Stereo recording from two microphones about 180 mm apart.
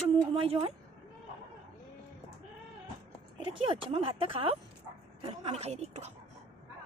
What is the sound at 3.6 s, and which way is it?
Speech, 30° right (ahead or behind).